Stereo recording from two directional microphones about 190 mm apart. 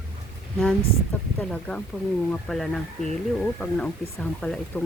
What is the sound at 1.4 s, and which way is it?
Speech, 5° left (ahead or behind).